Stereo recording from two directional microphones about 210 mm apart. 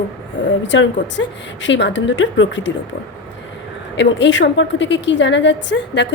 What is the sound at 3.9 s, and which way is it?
A woman's voice, 55° left (ahead or behind).